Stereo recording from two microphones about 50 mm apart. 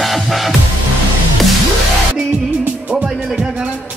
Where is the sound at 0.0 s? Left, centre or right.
Centre.